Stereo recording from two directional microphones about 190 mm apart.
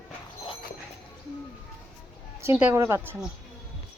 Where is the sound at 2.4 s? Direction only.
10° right (ahead or behind).